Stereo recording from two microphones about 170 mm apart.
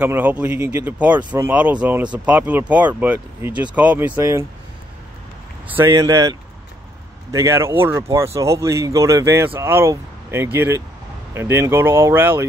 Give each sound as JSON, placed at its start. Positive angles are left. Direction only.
{"t": 0.0, "sound": "speech", "side_deg": -10}
{"t": 5.7, "sound": "speech", "side_deg": -15}